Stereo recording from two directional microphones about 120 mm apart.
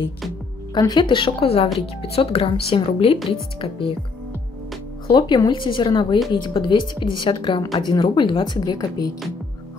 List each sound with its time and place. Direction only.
0.7 s speech: 35° left (ahead or behind)
5.0 s a woman's voice: 40° left (ahead or behind)